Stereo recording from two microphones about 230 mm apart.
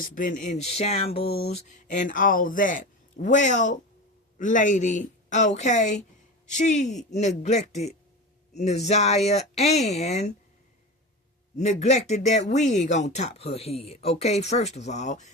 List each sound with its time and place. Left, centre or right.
0.0 s speech: left
11.5 s speech: left